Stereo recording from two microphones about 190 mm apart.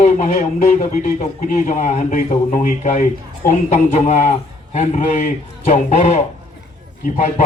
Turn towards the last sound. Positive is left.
turn(degrees=45)  # may be behind; listen again after turning